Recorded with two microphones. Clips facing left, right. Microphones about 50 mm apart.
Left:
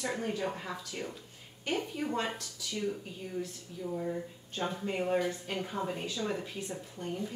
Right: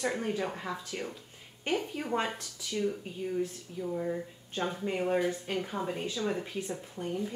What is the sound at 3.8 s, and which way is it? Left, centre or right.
Speech, centre.